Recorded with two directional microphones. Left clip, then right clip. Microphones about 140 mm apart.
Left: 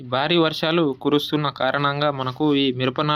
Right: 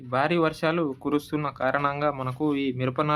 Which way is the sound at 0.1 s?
30° left (ahead or behind).